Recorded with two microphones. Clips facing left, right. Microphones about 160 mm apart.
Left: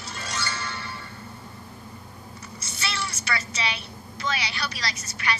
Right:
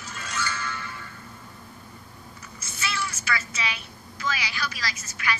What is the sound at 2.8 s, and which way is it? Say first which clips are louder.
A woman's voice: right 1 dB; 35° left (ahead or behind).